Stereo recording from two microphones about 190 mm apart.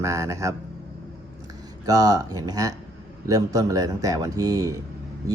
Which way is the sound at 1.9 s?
20° right (ahead or behind).